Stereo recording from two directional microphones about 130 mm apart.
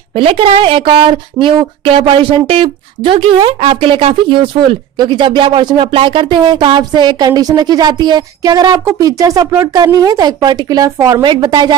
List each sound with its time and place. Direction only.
0.1 s speech: 45° right (ahead or behind); by 11.2 s 25° right (ahead or behind)
11.2 s speech: 35° right (ahead or behind)